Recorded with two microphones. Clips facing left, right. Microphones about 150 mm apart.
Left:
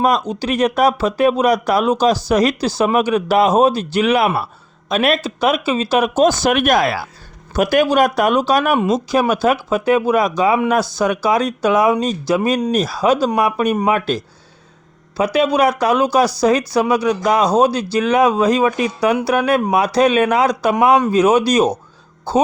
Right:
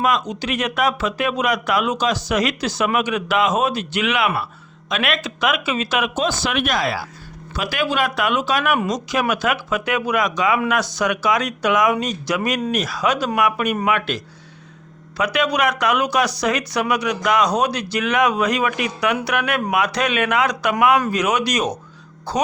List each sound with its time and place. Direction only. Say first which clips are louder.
0.0 s speech: left 4 dB; 35° left (ahead or behind)
15.2 s speech: left 5 dB; 30° left (ahead or behind)